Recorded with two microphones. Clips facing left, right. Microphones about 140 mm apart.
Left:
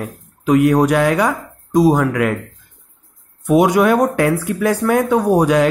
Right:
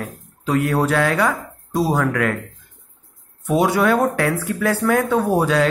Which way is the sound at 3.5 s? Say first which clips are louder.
Left 4 dB; 15° left (ahead or behind).